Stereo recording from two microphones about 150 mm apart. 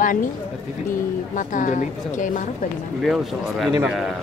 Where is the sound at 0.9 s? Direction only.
60° left (ahead or behind).